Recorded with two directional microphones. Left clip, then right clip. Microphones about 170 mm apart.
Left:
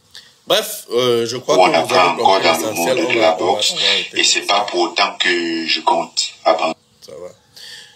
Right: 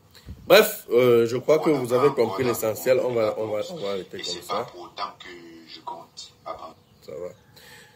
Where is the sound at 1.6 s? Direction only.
50° left (ahead or behind).